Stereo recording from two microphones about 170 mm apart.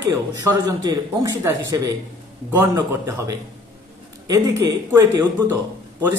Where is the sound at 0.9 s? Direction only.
20° right (ahead or behind).